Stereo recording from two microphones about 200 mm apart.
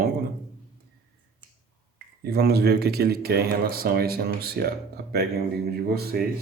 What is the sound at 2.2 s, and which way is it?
Speech, 50° right (ahead or behind).